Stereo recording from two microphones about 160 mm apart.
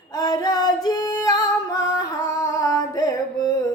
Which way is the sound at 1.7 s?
20° left (ahead or behind).